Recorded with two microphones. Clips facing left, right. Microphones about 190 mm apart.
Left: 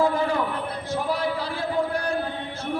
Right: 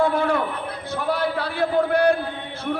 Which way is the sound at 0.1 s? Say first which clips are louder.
Right 2 dB; 70° right (ahead or behind).